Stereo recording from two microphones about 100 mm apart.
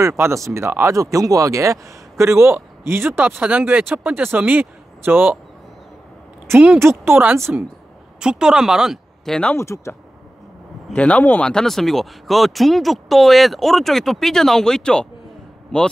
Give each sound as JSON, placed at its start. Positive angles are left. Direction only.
{"t": 0.2, "sound": "speech", "side_deg": -30}
{"t": 6.8, "sound": "speech", "side_deg": -25}
{"t": 8.2, "sound": "speech", "side_deg": -5}
{"t": 9.6, "sound": "speech", "side_deg": 30}
{"t": 11.0, "sound": "speech", "side_deg": 15}
{"t": 11.5, "sound": "speech", "side_deg": 5}